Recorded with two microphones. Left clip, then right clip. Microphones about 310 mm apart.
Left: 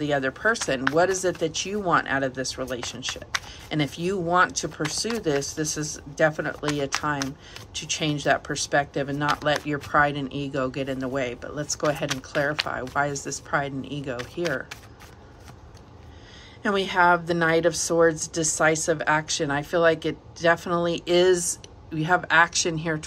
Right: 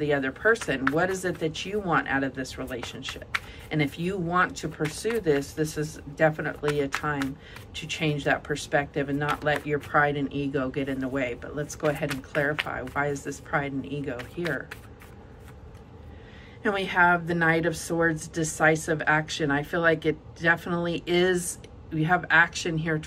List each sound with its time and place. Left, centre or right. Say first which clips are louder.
0.0 s a woman's voice: left 1 dB; centre
16.6 s a woman's voice: left 2 dB; centre